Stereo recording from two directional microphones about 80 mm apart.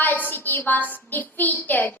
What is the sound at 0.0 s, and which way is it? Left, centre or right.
A woman's voice, left.